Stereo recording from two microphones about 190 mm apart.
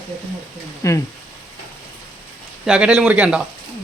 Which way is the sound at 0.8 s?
15° left (ahead or behind).